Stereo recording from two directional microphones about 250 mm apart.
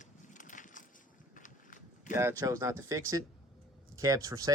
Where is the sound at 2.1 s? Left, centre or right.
Centre.